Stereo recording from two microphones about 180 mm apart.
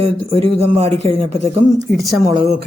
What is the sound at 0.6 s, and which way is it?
Speech, 35° right (ahead or behind).